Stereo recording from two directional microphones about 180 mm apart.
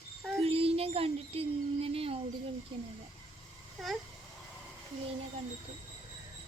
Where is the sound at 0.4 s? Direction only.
35° right (ahead or behind).